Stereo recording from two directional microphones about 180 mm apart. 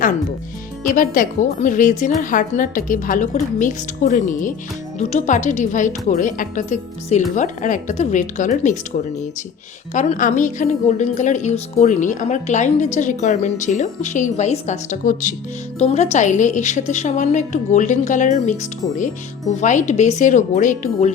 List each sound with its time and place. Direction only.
0.9 s a woman's voice: 50° left (ahead or behind)
9.9 s a woman's voice: 40° left (ahead or behind)